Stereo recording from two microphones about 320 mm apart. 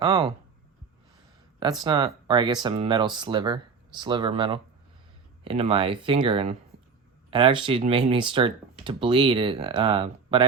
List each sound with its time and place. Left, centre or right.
0.0 s speech: centre
1.8 s speech: centre